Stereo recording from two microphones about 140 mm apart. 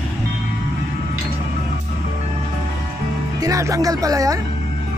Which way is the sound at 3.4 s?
25° right (ahead or behind).